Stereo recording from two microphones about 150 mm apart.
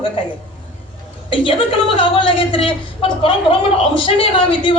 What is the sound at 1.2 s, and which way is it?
A woman's voice, 35° left (ahead or behind).